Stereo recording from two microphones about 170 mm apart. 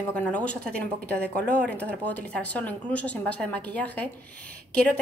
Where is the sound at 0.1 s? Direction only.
10° left (ahead or behind).